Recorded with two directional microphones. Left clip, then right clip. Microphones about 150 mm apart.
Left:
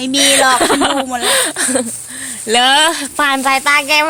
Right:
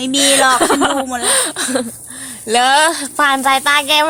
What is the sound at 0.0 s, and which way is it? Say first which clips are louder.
Speech: left 1 dB; 10° left (ahead or behind).